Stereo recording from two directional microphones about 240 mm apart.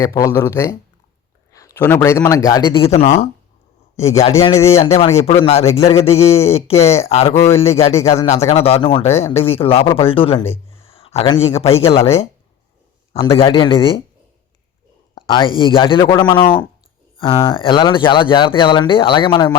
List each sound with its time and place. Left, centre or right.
0.0 s a man's voice: centre; by 3.2 s left
3.9 s a man's voice: centre
4.8 s speech: left
7.3 s a man's voice: centre
7.6 s speech: left
10.8 s a sound: left
11.6 s speech: left
13.1 s speech: left
15.3 s speech: left